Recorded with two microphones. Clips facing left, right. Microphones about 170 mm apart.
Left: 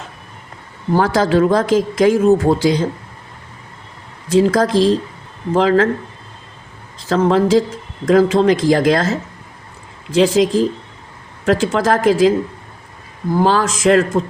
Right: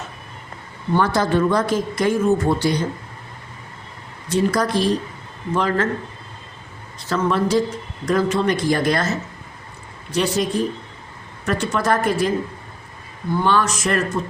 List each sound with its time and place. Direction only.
1.0 s speech: 90° left
4.3 s speech: 90° left
7.3 s speech: 90° left
13.4 s speech: 90° left